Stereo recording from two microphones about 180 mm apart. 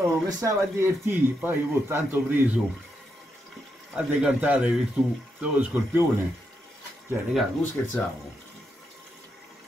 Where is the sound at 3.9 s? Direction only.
5° right (ahead or behind).